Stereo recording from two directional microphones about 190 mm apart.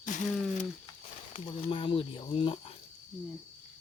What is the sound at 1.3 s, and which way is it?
Speech, 25° left (ahead or behind).